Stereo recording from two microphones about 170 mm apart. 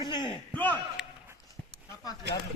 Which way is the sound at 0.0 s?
25° left (ahead or behind).